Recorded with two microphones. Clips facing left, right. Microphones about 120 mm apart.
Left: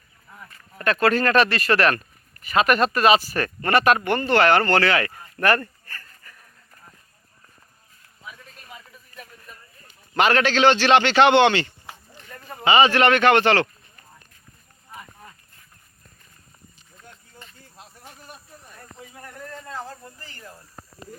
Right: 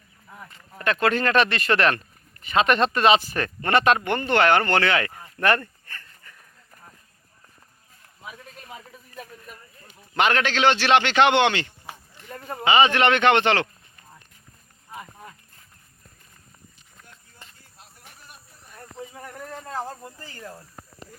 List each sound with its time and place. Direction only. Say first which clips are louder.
0.3 s speech: even; 25° right (ahead or behind)
9.8 s a man's voice: left 2 dB; 20° right (ahead or behind)